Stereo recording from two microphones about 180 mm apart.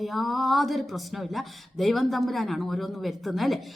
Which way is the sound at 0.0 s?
Centre (ahead or behind).